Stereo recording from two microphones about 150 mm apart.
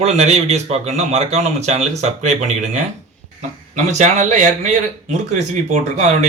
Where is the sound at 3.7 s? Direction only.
55° right (ahead or behind).